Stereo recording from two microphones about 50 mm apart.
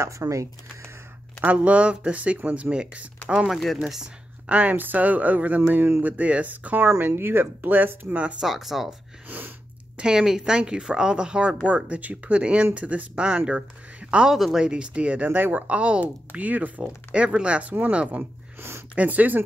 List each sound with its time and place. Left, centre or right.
0.0 s speech: right
1.4 s speech: right
3.4 s speech: centre
3.8 s speech: centre
4.5 s speech: right
8.4 s speech: centre
9.3 s sneeze: right
9.9 s speech: centre
14.3 s speech: centre
14.6 s speech: centre; by 15.6 s right
15.6 s speech: right
18.6 s a sound: right
18.9 s speech: right